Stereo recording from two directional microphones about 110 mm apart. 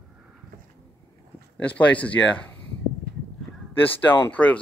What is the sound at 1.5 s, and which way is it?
Speech, 15° left (ahead or behind).